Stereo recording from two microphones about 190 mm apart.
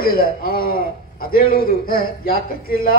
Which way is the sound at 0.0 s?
50° left (ahead or behind).